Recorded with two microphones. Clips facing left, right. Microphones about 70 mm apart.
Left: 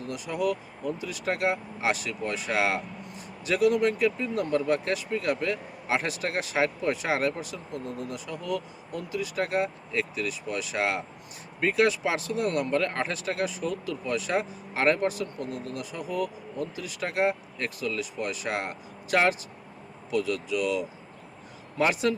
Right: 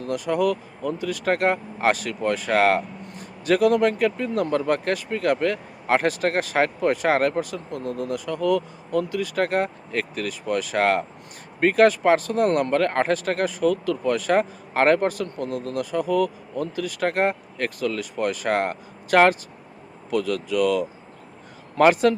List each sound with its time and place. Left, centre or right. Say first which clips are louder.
0.0 s speech: right 7 dB; right